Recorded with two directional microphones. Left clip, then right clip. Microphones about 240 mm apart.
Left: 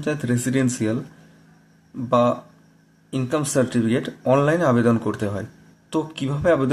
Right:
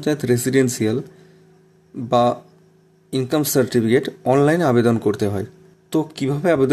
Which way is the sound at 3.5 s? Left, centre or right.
Right.